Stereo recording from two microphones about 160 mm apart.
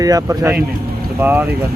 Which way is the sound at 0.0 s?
20° right (ahead or behind).